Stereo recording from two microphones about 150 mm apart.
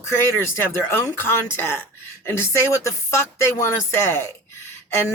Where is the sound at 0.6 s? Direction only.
15° left (ahead or behind).